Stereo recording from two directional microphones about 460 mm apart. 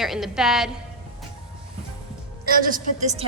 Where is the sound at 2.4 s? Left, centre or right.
Centre.